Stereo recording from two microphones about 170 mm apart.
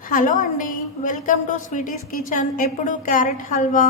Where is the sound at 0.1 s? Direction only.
50° left (ahead or behind).